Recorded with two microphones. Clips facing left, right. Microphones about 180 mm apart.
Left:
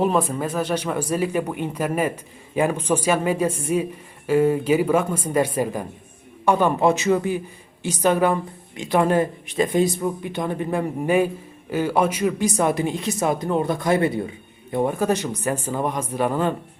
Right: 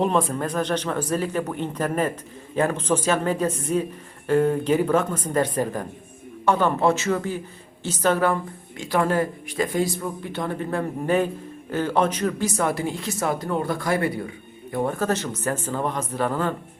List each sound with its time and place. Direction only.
0.0 s speech: 5° left (ahead or behind)